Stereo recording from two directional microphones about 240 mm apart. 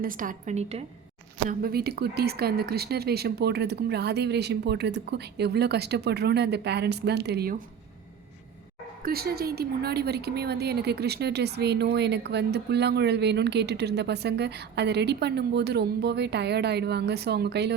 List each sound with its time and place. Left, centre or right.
0.0 s a woman's voice: right
1.5 s a woman's voice: right
9.0 s a woman's voice: right